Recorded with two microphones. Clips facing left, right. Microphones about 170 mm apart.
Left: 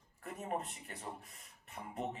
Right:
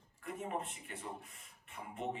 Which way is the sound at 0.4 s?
40° left (ahead or behind).